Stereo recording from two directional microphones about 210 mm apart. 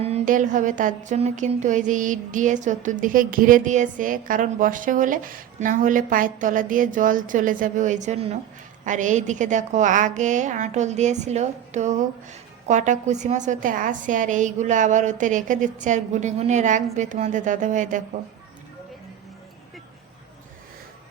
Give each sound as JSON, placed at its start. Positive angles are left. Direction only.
{"t": 0.0, "sound": "a woman's voice", "side_deg": -35}